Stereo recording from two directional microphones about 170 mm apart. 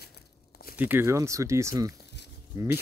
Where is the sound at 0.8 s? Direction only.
10° right (ahead or behind).